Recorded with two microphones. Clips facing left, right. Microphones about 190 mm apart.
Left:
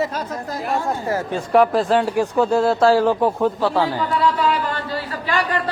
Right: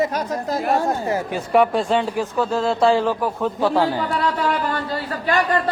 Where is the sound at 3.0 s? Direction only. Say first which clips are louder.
Left 4 dB; 15° left (ahead or behind).